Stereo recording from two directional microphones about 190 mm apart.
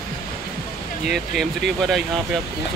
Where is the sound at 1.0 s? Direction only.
Centre (ahead or behind).